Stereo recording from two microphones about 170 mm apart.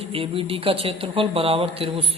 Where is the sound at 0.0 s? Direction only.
35° right (ahead or behind).